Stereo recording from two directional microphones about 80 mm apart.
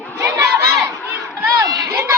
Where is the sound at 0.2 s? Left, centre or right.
Right.